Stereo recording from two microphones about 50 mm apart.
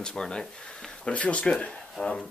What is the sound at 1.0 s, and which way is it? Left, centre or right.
Speech, left.